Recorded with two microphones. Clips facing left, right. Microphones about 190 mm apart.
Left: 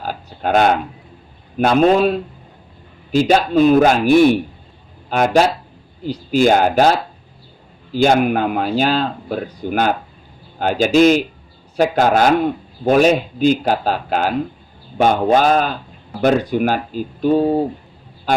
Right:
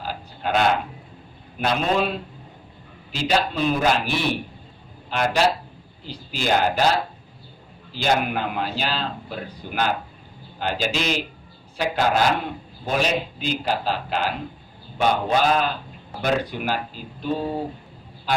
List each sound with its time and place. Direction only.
0.0 s a sound: 50° left (ahead or behind)
1.5 s a man's voice: 50° left (ahead or behind)
7.9 s a man's voice: 50° left (ahead or behind)